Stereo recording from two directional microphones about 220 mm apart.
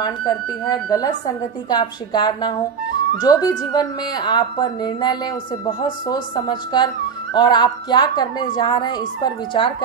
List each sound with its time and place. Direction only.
0.0 s speech: 20° left (ahead or behind)